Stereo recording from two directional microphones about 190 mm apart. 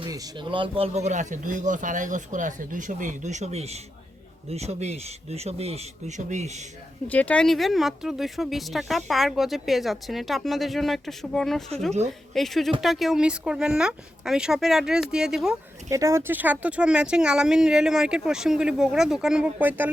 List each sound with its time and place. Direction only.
0.1 s speech: 20° right (ahead or behind); by 6.7 s 35° right (ahead or behind)
7.1 s speech: 5° left (ahead or behind)
15.9 s speech: 15° right (ahead or behind)